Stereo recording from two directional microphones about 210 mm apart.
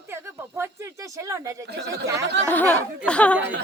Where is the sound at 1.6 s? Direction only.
55° right (ahead or behind).